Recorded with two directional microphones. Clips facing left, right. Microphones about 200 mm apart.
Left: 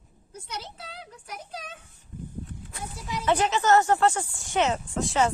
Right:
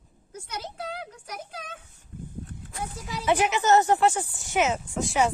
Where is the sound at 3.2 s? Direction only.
10° right (ahead or behind).